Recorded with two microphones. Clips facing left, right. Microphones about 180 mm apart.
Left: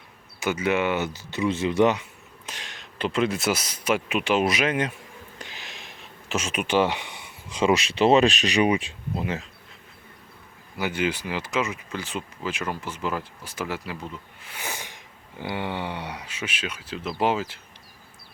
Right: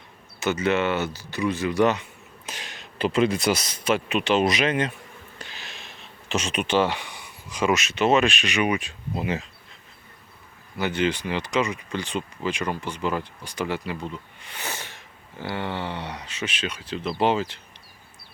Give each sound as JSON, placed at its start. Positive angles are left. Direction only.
{"t": 0.3, "sound": "speech", "side_deg": 10}
{"t": 2.5, "sound": "speech", "side_deg": -5}
{"t": 5.4, "sound": "a sound", "side_deg": 15}
{"t": 6.2, "sound": "speech", "side_deg": 5}
{"t": 9.1, "sound": "speech", "side_deg": 0}
{"t": 10.8, "sound": "speech", "side_deg": 10}